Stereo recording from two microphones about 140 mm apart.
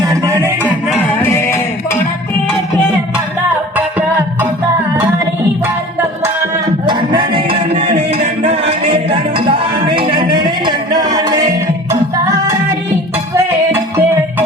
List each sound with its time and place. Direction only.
0.0 s a sound: 25° right (ahead or behind)
1.2 s music: 20° left (ahead or behind)
3.5 s music: 10° right (ahead or behind)
5.6 s music: 15° right (ahead or behind)
6.8 s music: 35° right (ahead or behind); by 14.4 s 15° right (ahead or behind)